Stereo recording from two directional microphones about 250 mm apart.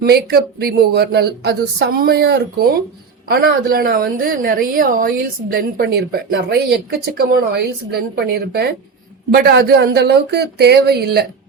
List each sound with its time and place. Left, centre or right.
0.0 s a woman's voice: right